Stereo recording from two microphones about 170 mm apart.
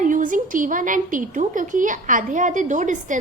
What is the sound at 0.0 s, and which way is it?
A woman's voice, 50° right (ahead or behind).